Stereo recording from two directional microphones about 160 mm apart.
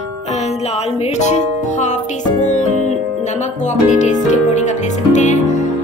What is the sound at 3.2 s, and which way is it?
Speech, 45° left (ahead or behind).